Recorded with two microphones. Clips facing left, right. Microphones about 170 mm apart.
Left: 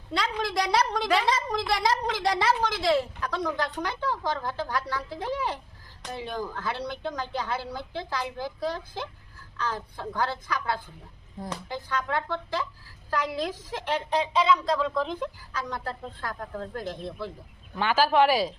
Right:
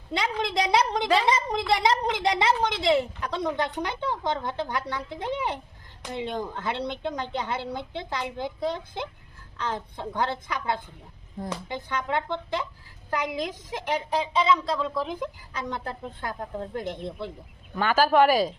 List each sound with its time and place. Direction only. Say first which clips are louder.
0.1 s a woman's voice: right 1 dB; 20° right (ahead or behind)
14.2 s speech: even; centre (ahead or behind)
15.5 s a woman's voice: right 1 dB; 20° right (ahead or behind)
17.7 s speech: right 2 dB; 45° right (ahead or behind)